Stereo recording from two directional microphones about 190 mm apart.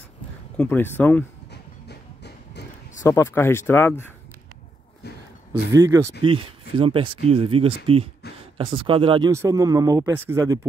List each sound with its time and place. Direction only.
0.6 s speech: 10° left (ahead or behind)
1.5 s music: 60° left (ahead or behind)
3.0 s speech: 15° left (ahead or behind)
5.0 s a sound: 60° left (ahead or behind)
5.5 s speech: 20° right (ahead or behind)
6.2 s speech: 25° right (ahead or behind)
9.3 s speech: 15° right (ahead or behind)